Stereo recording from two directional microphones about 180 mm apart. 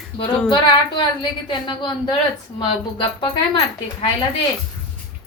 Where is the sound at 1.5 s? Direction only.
25° left (ahead or behind).